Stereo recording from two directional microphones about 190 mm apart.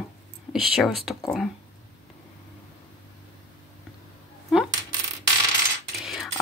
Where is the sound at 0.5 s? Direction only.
Centre (ahead or behind).